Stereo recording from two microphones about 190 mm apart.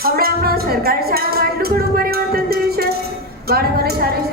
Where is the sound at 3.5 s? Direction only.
55° right (ahead or behind).